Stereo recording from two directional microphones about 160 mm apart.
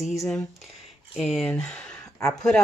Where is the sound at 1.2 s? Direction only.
Centre (ahead or behind).